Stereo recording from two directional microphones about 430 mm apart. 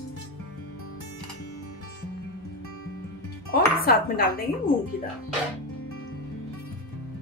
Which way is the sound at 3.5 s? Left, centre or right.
Left.